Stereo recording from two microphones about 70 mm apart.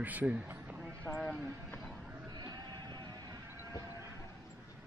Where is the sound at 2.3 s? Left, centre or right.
Right.